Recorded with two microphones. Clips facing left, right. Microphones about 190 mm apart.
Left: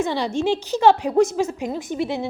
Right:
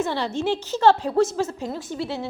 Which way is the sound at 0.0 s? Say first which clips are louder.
Left 3 dB; 15° left (ahead or behind).